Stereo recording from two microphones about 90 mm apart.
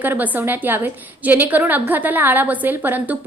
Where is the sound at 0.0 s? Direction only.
20° right (ahead or behind).